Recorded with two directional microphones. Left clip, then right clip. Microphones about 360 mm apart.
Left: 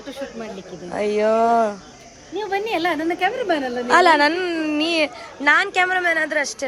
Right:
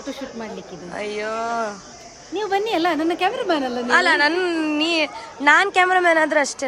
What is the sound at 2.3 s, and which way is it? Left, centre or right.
A woman's voice, right.